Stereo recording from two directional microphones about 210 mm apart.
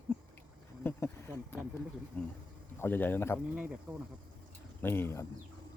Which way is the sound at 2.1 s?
10° left (ahead or behind).